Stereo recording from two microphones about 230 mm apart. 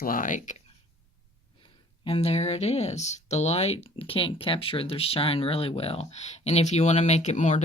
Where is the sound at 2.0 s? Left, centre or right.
Left.